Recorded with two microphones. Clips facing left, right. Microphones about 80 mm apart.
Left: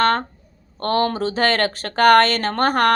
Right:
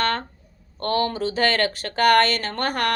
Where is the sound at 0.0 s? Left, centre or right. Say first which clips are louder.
Left 6 dB; left.